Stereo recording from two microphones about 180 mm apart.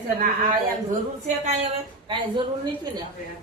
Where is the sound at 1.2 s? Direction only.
40° right (ahead or behind).